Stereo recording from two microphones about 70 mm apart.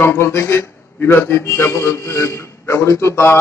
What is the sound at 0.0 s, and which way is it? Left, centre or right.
A man's voice, left.